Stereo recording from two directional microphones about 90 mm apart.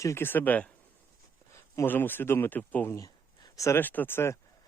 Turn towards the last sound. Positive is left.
turn(degrees=25)  # may be behind; listen again after turning